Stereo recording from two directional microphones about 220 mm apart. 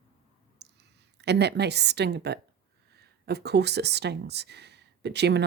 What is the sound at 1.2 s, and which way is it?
Speech, 50° right (ahead or behind).